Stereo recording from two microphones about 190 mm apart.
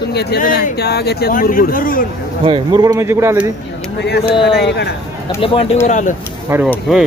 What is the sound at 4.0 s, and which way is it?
Speech, 60° left (ahead or behind).